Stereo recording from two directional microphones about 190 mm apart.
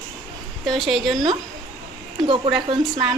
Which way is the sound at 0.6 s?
Centre (ahead or behind).